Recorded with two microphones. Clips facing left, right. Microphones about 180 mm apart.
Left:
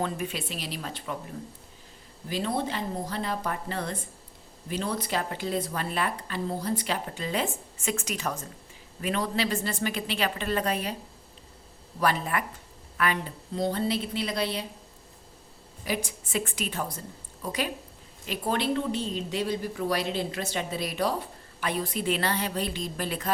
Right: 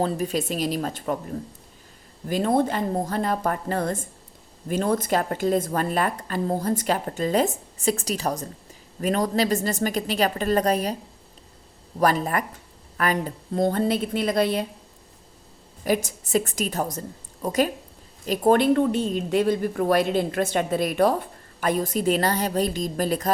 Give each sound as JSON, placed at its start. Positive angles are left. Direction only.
{"t": 0.0, "sound": "a woman's voice", "side_deg": -40}
{"t": 11.9, "sound": "a woman's voice", "side_deg": -40}
{"t": 15.8, "sound": "a woman's voice", "side_deg": -45}